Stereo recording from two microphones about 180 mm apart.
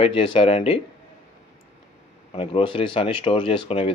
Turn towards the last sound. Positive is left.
turn(degrees=30)  # may be behind; listen again after turning